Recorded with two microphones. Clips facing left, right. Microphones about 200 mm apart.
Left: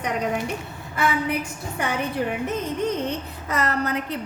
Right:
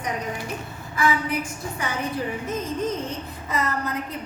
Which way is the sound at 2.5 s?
70° left (ahead or behind).